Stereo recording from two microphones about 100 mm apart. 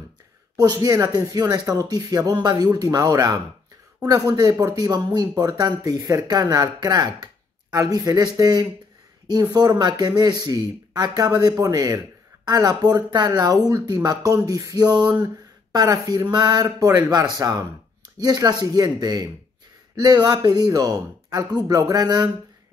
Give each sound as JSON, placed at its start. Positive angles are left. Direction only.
{"t": 0.6, "sound": "speech", "side_deg": -40}
{"t": 15.7, "sound": "speech", "side_deg": -40}